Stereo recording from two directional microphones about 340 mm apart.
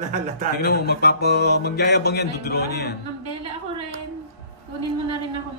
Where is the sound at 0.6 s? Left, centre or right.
Left.